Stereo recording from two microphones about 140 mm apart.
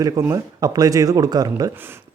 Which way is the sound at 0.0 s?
25° right (ahead or behind).